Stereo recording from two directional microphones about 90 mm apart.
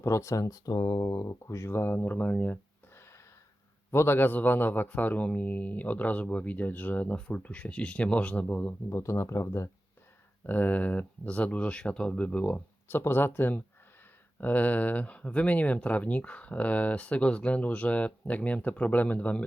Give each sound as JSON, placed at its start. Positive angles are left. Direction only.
{"t": 0.0, "sound": "speech", "side_deg": 35}
{"t": 8.9, "sound": "speech", "side_deg": 30}
{"t": 10.4, "sound": "speech", "side_deg": 20}